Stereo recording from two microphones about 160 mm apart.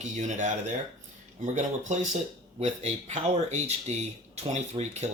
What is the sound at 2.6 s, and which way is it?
Speech, 45° right (ahead or behind).